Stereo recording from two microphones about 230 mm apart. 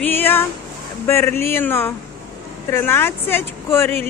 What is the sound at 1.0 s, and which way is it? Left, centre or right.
A woman's voice, centre.